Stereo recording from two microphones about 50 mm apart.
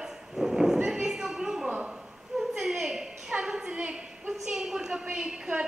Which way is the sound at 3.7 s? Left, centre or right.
Right.